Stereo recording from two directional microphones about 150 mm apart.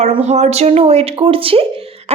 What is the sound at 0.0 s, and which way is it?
Speech, 45° right (ahead or behind).